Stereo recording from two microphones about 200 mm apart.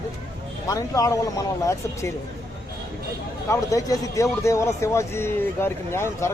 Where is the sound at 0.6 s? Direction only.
15° left (ahead or behind).